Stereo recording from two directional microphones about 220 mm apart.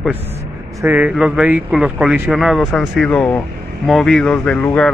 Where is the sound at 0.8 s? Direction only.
10° right (ahead or behind).